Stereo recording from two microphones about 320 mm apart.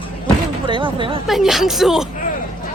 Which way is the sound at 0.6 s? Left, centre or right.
Centre.